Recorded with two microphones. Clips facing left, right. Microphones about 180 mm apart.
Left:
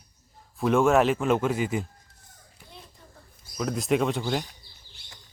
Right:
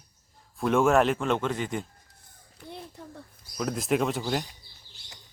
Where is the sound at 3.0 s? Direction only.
65° right (ahead or behind).